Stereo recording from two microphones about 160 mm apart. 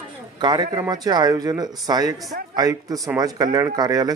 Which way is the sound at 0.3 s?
25° right (ahead or behind).